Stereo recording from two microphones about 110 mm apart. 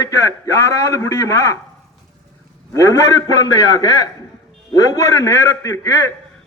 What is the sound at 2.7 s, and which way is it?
A man's voice, 30° left (ahead or behind).